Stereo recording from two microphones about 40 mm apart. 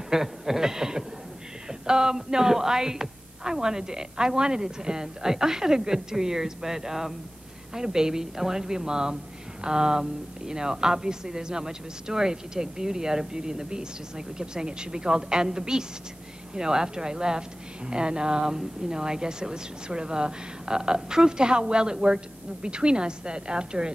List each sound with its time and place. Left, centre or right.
0.1 s a woman's voice: centre